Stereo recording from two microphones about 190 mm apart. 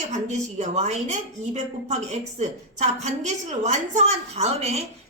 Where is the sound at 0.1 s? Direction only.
35° right (ahead or behind).